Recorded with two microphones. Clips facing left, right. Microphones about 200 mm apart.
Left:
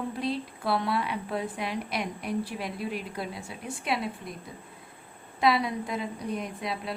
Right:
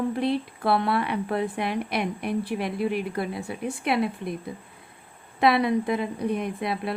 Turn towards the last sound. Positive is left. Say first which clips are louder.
# right 5 dB
turn(degrees=-60)  # may be behind; listen again after turning